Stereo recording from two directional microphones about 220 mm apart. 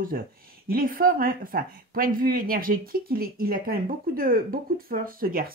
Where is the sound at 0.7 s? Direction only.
40° right (ahead or behind).